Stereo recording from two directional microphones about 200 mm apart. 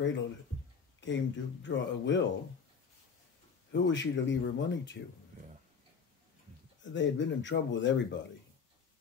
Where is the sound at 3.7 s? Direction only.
65° left (ahead or behind).